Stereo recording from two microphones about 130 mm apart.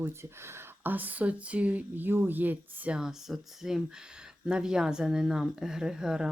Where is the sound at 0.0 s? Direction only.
20° right (ahead or behind).